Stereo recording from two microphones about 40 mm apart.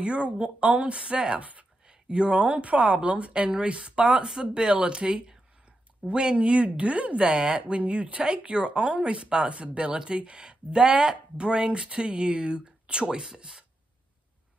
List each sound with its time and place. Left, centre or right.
0.0 s speech: right
1.4 s speech: right; by 13.7 s centre